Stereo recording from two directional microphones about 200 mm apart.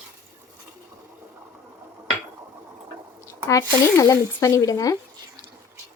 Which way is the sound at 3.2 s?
15° left (ahead or behind).